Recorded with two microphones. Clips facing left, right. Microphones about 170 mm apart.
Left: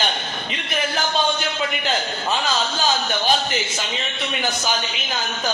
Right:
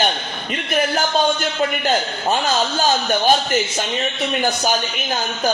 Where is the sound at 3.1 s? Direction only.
50° right (ahead or behind).